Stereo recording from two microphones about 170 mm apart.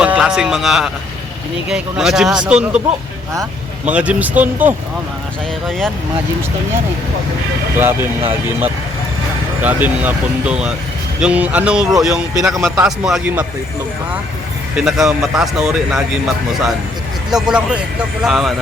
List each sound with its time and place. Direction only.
0.0 s speech: 5° right (ahead or behind)
3.8 s speech: 5° right (ahead or behind)
7.8 s speech: 10° right (ahead or behind)
14.8 s speech: centre (ahead or behind)
17.3 s speech: 5° right (ahead or behind)